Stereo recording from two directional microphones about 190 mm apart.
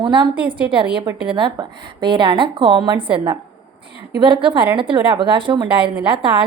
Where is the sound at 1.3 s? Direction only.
25° right (ahead or behind).